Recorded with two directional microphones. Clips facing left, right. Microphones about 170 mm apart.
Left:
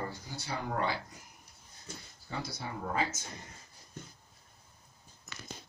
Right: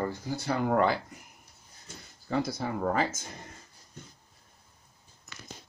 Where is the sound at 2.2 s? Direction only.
50° right (ahead or behind).